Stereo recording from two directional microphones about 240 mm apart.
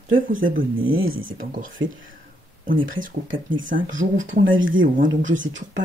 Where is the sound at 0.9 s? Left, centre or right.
Right.